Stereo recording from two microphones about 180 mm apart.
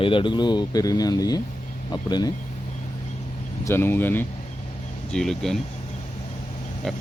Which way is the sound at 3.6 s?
15° left (ahead or behind).